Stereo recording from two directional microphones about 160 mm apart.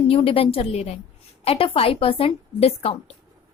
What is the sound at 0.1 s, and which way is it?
A woman's voice, 35° left (ahead or behind).